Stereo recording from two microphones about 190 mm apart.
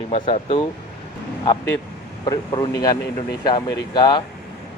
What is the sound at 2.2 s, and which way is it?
Speech, 20° left (ahead or behind).